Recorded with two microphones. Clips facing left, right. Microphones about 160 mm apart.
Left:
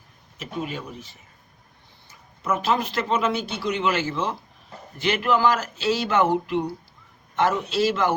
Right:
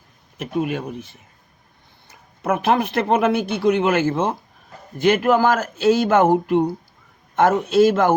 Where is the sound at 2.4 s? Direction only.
60° right (ahead or behind).